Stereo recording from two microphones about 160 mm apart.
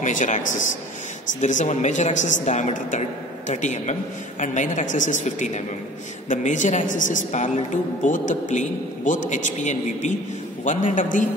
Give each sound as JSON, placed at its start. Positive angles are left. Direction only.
{"t": 0.0, "sound": "a woman's voice", "side_deg": 50}